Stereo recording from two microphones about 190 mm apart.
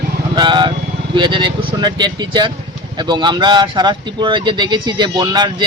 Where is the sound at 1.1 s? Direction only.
25° right (ahead or behind).